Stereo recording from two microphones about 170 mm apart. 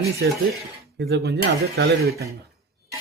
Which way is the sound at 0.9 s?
75° right (ahead or behind).